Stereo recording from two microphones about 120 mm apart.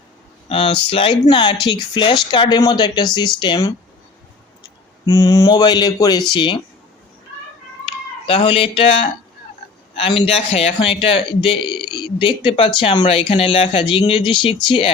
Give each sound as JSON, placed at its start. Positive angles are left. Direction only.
{"t": 0.4, "sound": "a man's voice", "side_deg": 50}
{"t": 5.0, "sound": "speech", "side_deg": 30}
{"t": 8.3, "sound": "a man's voice", "side_deg": 45}